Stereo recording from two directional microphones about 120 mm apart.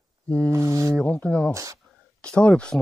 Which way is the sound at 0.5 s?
25° right (ahead or behind).